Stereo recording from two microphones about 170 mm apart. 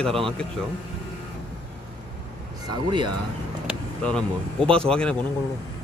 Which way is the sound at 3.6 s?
5° left (ahead or behind).